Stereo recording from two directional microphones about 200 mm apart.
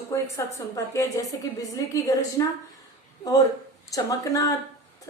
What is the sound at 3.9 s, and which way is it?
Speech, 15° left (ahead or behind).